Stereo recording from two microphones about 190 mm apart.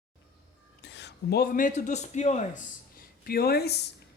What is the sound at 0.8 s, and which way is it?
A woman's voice, 65° left (ahead or behind).